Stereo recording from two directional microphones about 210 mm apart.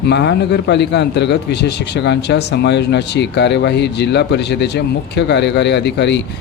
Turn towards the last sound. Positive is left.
turn(degrees=55)  # may be behind; listen again after turning